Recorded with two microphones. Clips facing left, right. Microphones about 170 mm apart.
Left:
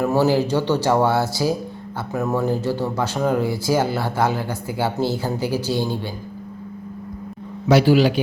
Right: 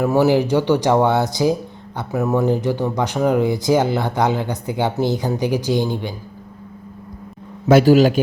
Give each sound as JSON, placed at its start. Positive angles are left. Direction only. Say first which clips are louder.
{"t": 0.0, "sound": "speech", "louder": "right 2 dB", "side_deg": -15}
{"t": 7.7, "sound": "a man's voice", "louder": "right 3 dB", "side_deg": -45}